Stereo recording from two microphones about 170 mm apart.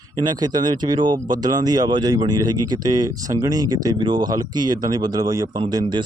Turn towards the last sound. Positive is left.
turn(degrees=-25)  # may be behind; listen again after turning